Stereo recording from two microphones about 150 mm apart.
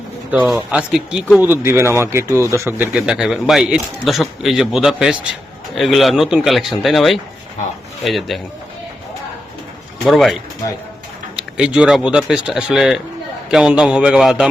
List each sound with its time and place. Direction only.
0.3 s speech: 5° right (ahead or behind)
1.5 s speech: 15° right (ahead or behind); by 8.4 s centre (ahead or behind)
10.1 s speech: centre (ahead or behind)
11.3 s speech: 5° right (ahead or behind)